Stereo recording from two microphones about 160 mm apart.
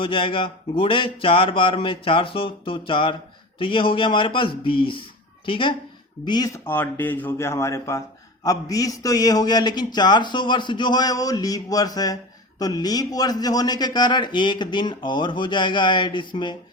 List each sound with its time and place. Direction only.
0.0 s speech: 35° left (ahead or behind)
6.7 s speech: 15° left (ahead or behind); by 16.6 s 30° left (ahead or behind)